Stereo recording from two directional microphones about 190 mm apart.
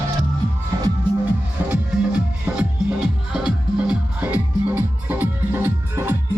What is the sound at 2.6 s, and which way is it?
Music, 5° right (ahead or behind).